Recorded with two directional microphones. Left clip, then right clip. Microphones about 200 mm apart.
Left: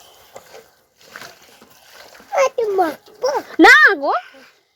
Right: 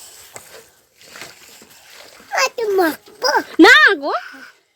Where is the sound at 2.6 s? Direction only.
65° right (ahead or behind).